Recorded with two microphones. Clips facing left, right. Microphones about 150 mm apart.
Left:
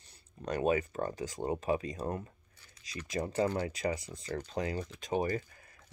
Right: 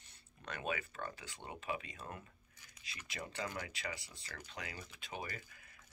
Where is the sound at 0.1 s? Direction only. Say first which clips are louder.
Left 12 dB; 35° left (ahead or behind).